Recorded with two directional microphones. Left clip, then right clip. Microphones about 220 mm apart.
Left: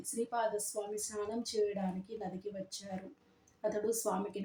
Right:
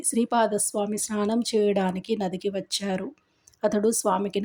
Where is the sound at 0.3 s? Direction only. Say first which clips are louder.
Right 12 dB; 35° right (ahead or behind).